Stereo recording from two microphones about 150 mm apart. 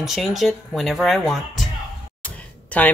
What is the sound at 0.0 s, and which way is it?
A woman's voice, centre (ahead or behind).